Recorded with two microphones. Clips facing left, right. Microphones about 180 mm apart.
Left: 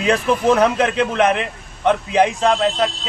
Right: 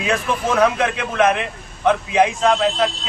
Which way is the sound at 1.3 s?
Centre (ahead or behind).